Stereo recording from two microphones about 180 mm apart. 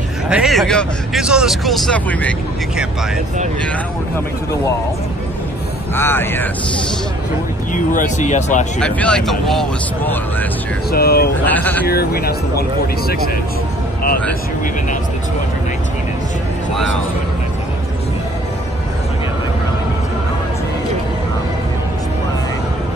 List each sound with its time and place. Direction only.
0.3 s speech: centre (ahead or behind)
5.9 s speech: 10° left (ahead or behind)
7.7 s speech: 45° left (ahead or behind)
8.7 s speech: 5° left (ahead or behind)
10.9 s speech: 60° left (ahead or behind)
11.4 s speech: 10° left (ahead or behind)
11.9 s speech: 60° left (ahead or behind)